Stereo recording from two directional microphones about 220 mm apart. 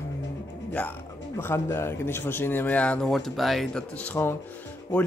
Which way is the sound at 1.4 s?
10° left (ahead or behind).